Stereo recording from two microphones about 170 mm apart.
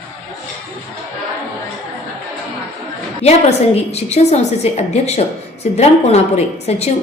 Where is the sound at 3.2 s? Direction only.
40° left (ahead or behind).